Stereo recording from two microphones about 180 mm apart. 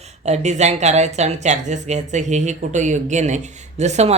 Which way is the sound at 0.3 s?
40° right (ahead or behind).